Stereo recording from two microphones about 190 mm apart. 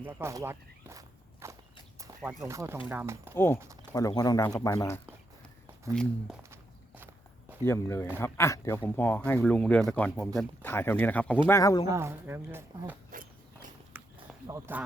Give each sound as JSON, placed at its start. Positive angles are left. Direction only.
{"t": 0.0, "sound": "speech", "side_deg": -10}
{"t": 2.0, "sound": "a sound", "side_deg": -15}
{"t": 2.5, "sound": "speech", "side_deg": -15}
{"t": 3.3, "sound": "speech", "side_deg": 10}
{"t": 5.9, "sound": "speech", "side_deg": 5}
{"t": 6.5, "sound": "walk", "side_deg": -10}
{"t": 7.6, "sound": "speech", "side_deg": 15}
{"t": 11.9, "sound": "speech", "side_deg": -15}
{"t": 13.9, "sound": "a sound", "side_deg": -10}
{"t": 14.4, "sound": "speech", "side_deg": -15}